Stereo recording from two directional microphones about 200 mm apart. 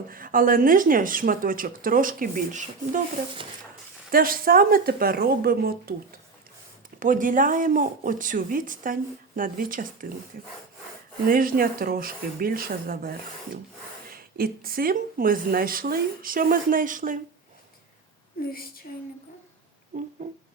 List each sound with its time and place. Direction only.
0.1 s a woman's voice: 45° right (ahead or behind)
4.1 s a woman's voice: 45° right (ahead or behind)
7.0 s a woman's voice: 40° right (ahead or behind)